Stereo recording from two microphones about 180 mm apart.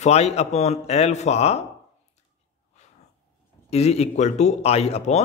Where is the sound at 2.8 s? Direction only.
40° left (ahead or behind).